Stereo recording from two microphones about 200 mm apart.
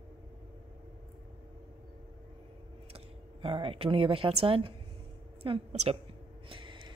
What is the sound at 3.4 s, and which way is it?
A woman's voice, 25° right (ahead or behind).